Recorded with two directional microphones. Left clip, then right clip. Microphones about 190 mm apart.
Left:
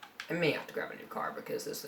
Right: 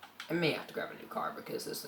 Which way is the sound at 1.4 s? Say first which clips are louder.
Left 2 dB; 45° left (ahead or behind).